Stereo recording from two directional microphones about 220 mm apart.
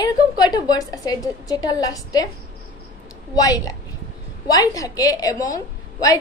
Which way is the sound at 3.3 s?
15° left (ahead or behind).